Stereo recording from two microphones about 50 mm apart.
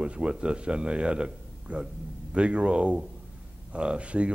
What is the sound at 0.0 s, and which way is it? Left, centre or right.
A man's voice, centre.